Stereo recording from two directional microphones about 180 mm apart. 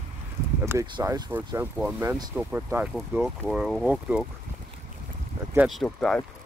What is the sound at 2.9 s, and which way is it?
Speech, centre (ahead or behind).